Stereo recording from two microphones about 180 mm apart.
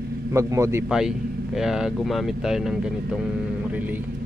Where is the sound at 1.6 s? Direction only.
5° right (ahead or behind).